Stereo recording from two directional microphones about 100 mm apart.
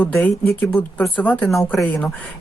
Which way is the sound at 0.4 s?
20° left (ahead or behind).